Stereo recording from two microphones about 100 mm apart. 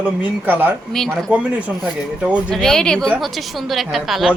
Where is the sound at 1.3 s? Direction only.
15° right (ahead or behind).